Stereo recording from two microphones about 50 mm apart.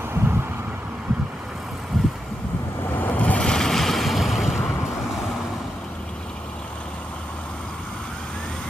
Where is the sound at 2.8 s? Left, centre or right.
Left.